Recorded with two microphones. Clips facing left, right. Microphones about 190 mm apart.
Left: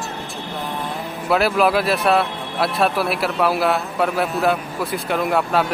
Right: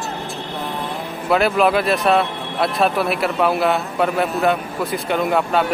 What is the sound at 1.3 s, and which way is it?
A man's voice, centre (ahead or behind).